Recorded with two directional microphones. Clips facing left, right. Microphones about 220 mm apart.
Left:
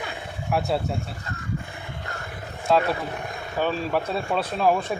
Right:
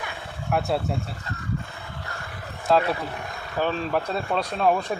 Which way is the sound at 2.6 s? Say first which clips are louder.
Even; centre (ahead or behind).